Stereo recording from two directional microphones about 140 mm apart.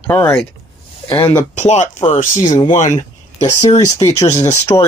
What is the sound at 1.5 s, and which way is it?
Speech, 55° left (ahead or behind).